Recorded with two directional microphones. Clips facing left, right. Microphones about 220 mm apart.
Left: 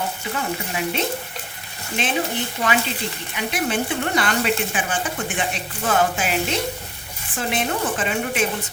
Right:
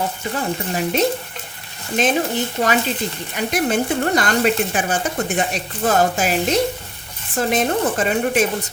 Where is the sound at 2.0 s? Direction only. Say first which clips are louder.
Right 7 dB; 40° right (ahead or behind).